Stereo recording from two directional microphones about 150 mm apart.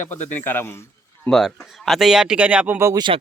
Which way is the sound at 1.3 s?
Centre (ahead or behind).